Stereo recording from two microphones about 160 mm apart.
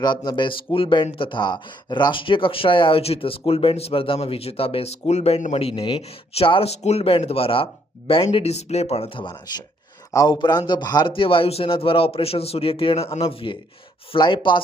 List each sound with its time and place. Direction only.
0.0 s a man's voice: 30° left (ahead or behind)